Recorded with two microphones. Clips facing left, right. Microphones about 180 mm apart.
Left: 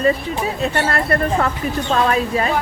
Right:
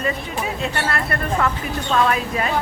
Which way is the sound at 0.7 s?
35° left (ahead or behind).